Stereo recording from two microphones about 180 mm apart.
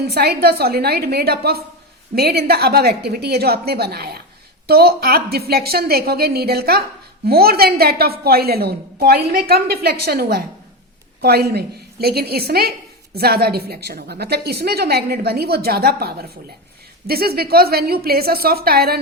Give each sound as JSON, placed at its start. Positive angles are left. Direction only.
{"t": 0.1, "sound": "a woman's voice", "side_deg": -60}